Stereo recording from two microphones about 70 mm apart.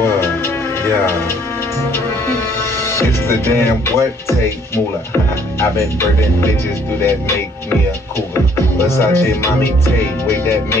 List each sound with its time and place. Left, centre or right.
0.0 s music: left
2.9 s speech: left
8.8 s speech: left